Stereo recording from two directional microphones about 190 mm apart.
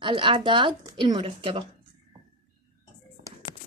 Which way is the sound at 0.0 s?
25° right (ahead or behind).